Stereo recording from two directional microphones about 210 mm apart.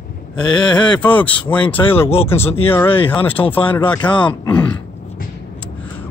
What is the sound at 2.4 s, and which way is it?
Speech, 25° left (ahead or behind).